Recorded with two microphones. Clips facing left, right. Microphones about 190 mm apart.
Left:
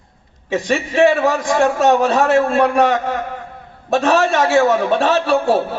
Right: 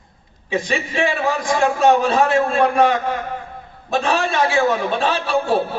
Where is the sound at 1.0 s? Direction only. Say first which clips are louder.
Left 8 dB; 70° left (ahead or behind).